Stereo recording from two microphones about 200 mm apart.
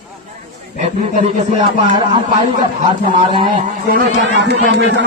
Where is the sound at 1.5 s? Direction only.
25° right (ahead or behind).